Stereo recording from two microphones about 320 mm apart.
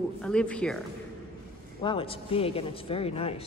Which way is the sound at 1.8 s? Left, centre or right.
Centre.